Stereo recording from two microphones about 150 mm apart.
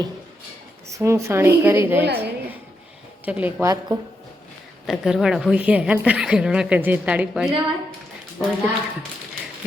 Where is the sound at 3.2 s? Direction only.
10° right (ahead or behind).